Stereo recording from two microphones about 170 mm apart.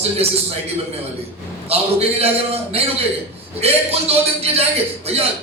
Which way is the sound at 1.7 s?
35° right (ahead or behind).